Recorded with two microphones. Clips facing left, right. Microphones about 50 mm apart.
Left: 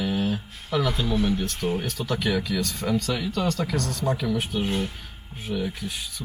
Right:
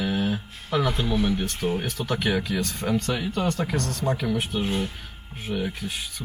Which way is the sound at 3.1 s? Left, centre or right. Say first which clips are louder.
Even; centre.